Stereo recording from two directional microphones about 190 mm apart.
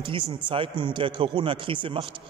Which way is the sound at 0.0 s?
30° right (ahead or behind).